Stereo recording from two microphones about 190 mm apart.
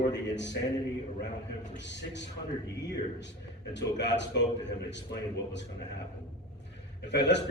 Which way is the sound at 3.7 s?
70° left (ahead or behind).